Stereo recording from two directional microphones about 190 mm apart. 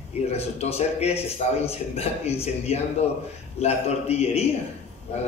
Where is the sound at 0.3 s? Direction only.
35° left (ahead or behind).